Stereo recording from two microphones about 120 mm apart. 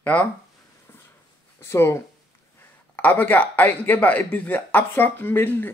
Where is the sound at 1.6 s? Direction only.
20° left (ahead or behind).